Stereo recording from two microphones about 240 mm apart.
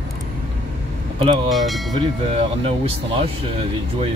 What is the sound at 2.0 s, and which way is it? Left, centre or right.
Speech, right.